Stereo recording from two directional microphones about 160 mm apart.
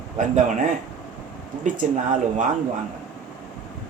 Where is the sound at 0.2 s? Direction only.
55° right (ahead or behind).